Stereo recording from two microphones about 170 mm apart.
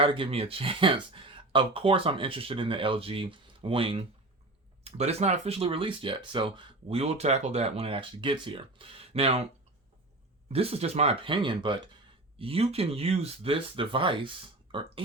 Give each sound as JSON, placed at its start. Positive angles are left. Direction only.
{"t": 0.0, "sound": "speech", "side_deg": -30}
{"t": 10.5, "sound": "speech", "side_deg": -35}